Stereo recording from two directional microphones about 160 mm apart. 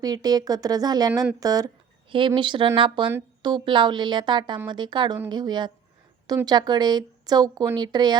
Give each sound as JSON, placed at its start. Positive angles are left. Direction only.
{"t": 0.0, "sound": "speech", "side_deg": -25}